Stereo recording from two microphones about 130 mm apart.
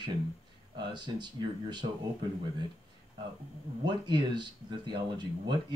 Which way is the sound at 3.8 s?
35° right (ahead or behind).